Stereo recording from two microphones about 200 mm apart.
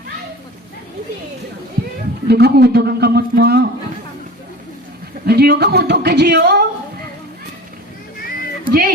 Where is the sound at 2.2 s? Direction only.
55° right (ahead or behind).